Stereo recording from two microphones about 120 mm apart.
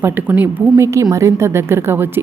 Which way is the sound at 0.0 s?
15° right (ahead or behind).